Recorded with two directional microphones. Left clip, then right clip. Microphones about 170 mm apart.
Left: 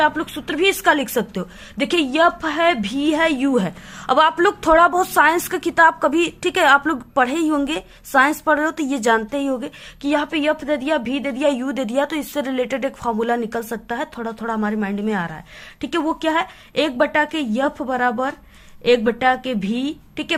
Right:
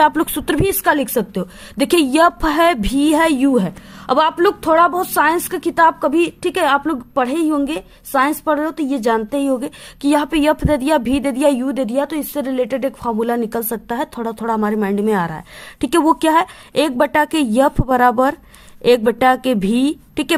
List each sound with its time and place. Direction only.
0.0 s a woman's voice: 50° right (ahead or behind)
0.8 s a woman's voice: 25° right (ahead or behind)
1.8 s a woman's voice: 45° right (ahead or behind)
3.5 s a woman's voice: 25° right (ahead or behind); by 20.3 s 50° right (ahead or behind)